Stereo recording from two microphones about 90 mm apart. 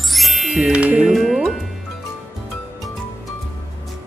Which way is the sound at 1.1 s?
Centre (ahead or behind).